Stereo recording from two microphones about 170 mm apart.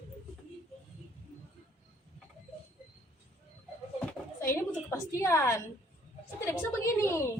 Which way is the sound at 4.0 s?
15° left (ahead or behind).